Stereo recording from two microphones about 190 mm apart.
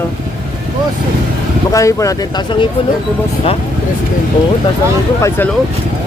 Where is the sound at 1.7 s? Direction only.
15° left (ahead or behind).